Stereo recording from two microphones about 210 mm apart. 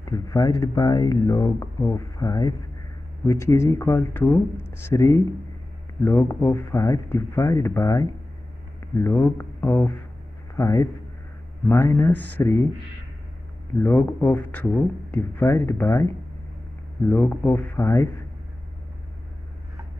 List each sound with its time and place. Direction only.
0.0 s a man's voice: 15° left (ahead or behind)
13.8 s speech: 15° left (ahead or behind)